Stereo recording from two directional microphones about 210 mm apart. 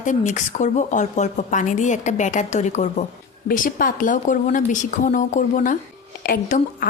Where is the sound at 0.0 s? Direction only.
35° left (ahead or behind).